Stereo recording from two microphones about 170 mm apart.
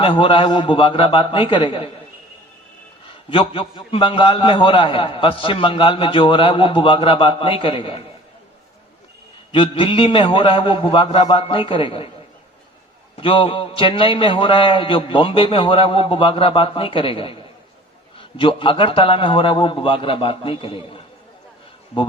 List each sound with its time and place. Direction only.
0.0 s a man's voice: 30° left (ahead or behind)
3.2 s a man's voice: 30° left (ahead or behind)
9.5 s a man's voice: 30° left (ahead or behind)
13.1 s a man's voice: 30° left (ahead or behind)